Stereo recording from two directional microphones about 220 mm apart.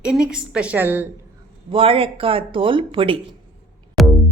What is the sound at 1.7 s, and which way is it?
Speech, 25° right (ahead or behind).